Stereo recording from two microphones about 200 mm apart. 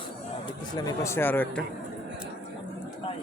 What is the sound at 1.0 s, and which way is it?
Speech, 10° left (ahead or behind).